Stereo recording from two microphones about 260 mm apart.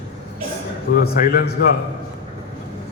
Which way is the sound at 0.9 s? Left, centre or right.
Left.